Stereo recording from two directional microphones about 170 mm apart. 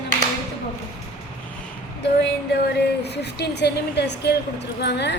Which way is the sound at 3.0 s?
80° left.